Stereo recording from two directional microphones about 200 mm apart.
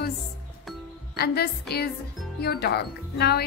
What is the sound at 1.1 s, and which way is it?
Speech, 50° left (ahead or behind).